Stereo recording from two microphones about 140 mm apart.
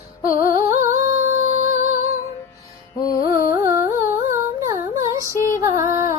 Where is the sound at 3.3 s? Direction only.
20° right (ahead or behind).